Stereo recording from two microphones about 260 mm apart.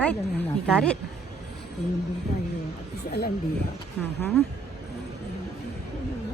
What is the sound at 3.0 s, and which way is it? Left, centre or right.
Speech, left.